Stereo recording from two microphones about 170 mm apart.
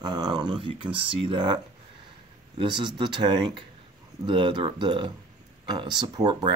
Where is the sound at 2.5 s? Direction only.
30° right (ahead or behind).